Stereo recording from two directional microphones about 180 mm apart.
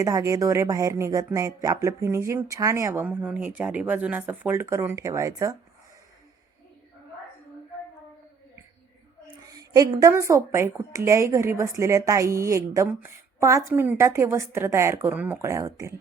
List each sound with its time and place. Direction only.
0.0 s a woman's voice: 20° right (ahead or behind)
9.5 s a woman's voice: 20° right (ahead or behind)